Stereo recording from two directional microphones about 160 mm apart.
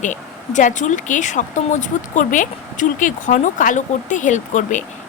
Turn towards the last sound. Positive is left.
turn(degrees=50)  # may be behind; listen again after turning